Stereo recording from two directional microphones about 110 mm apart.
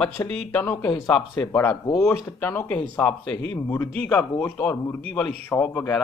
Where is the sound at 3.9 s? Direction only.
15° left (ahead or behind).